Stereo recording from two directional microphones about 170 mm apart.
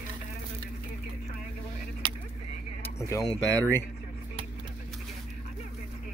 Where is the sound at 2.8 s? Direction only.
15° left (ahead or behind).